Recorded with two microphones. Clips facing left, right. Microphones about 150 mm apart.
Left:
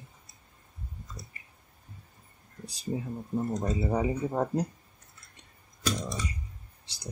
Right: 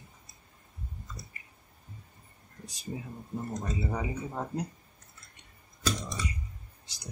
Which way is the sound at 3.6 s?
35° left (ahead or behind).